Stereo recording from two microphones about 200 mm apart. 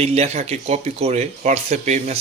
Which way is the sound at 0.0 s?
30° right (ahead or behind).